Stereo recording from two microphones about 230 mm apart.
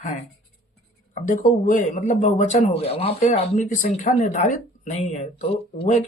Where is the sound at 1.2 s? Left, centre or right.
Left.